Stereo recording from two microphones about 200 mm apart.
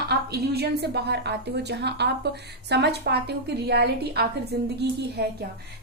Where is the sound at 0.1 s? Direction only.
55° right (ahead or behind).